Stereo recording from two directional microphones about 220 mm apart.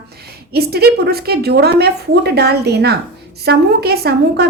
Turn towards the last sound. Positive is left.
turn(degrees=-45)  # may be behind; listen again after turning